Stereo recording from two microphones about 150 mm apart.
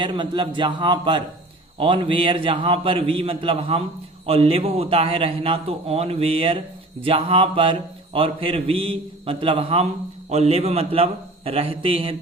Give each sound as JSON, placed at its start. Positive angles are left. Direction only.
{"t": 0.0, "sound": "a man's voice", "side_deg": -35}